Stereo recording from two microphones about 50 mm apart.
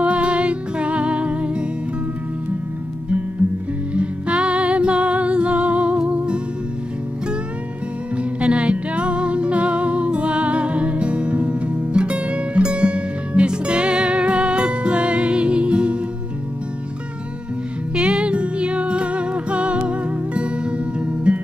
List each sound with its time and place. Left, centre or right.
0.0 s music: right
3.9 s music: right
8.2 s music: right
17.9 s music: right